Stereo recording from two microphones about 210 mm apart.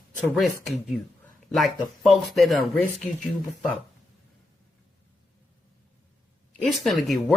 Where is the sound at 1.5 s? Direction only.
Centre (ahead or behind).